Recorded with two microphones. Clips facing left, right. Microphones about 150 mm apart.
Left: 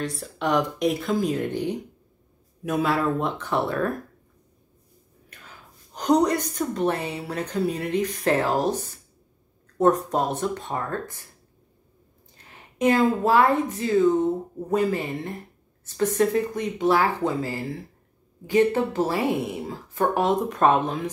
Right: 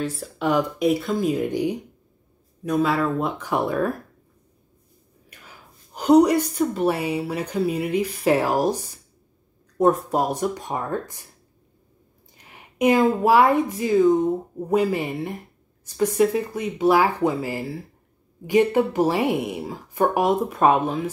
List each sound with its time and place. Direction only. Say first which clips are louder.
0.0 s speech: right 2 dB; centre (ahead or behind)
2.6 s speech: right 2 dB; centre (ahead or behind)
5.9 s speech: right 5 dB; 10° right (ahead or behind)
12.4 s speech: right 3 dB; 15° right (ahead or behind)